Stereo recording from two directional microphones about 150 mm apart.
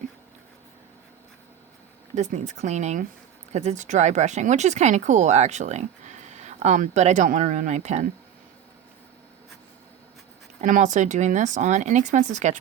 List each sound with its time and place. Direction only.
2.1 s speech: 50° right (ahead or behind)
10.6 s speech: 55° right (ahead or behind)